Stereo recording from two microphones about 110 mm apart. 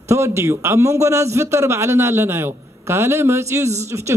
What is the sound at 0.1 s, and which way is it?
A man's voice, 25° right (ahead or behind).